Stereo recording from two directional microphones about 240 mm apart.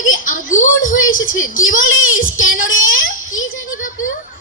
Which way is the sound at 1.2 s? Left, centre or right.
Left.